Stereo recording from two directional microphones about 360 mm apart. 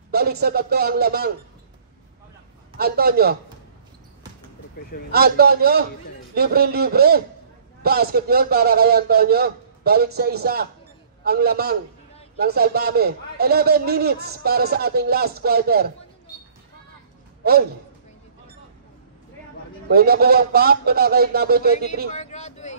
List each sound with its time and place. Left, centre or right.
0.1 s a man's voice: right
2.8 s a man's voice: right
5.1 s a man's voice: right
17.4 s a sound: right
19.9 s a man's voice: right
22.1 s a sound: centre